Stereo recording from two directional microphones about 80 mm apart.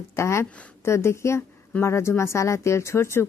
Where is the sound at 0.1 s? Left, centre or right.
Left.